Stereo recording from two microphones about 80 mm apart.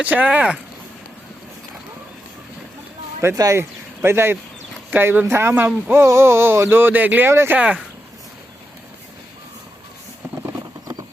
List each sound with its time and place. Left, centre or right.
0.0 s speech: centre
3.3 s speech: right
3.6 s speech: right